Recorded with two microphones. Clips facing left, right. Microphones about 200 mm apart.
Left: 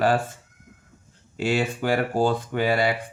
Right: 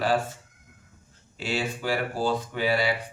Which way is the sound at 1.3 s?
55° left (ahead or behind).